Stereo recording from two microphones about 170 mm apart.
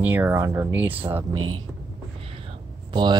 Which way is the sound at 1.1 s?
25° right (ahead or behind).